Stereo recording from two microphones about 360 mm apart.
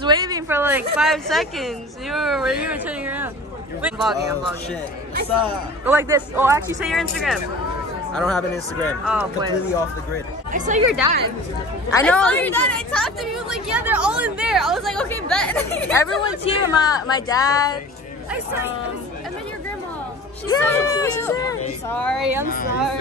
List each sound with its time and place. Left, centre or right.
0.0 s a woman's voice: centre
5.4 s a woman's voice: centre
10.5 s speech: right
11.9 s a woman's voice: centre
20.4 s a woman's voice: centre
22.5 s a woman's voice: left